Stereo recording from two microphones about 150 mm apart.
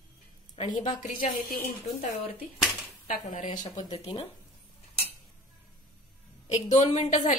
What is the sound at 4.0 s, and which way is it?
Speech, 40° left (ahead or behind).